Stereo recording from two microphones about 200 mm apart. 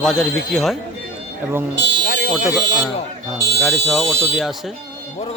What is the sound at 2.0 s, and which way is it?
Alarm, 45° left (ahead or behind).